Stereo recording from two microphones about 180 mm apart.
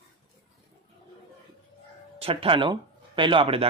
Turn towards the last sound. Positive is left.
turn(degrees=-30)  # may be behind; listen again after turning